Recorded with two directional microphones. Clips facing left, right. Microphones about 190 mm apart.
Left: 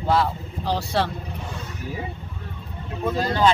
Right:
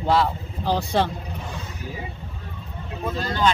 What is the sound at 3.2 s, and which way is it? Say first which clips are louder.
Speech: left 3 dB; 35° left (ahead or behind).